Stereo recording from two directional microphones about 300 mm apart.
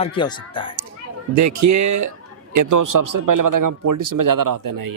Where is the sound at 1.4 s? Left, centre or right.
Right.